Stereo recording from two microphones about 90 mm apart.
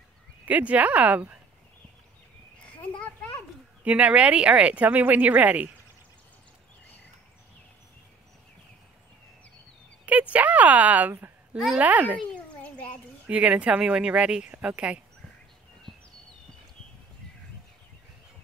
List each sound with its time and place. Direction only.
0.5 s speech: 15° right (ahead or behind)
2.6 s a sound: 15° left (ahead or behind)
3.8 s speech: 15° right (ahead or behind)
10.0 s speech: 15° right (ahead or behind)
12.4 s a sound: 15° left (ahead or behind)
13.3 s speech: 15° right (ahead or behind)